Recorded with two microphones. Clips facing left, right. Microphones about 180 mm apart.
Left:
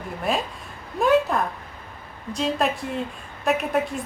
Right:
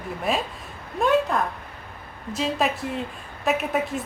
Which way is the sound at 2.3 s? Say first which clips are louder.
Left 1 dB; centre (ahead or behind).